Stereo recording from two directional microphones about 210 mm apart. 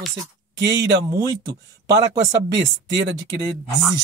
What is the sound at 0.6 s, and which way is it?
Speech, 55° right (ahead or behind).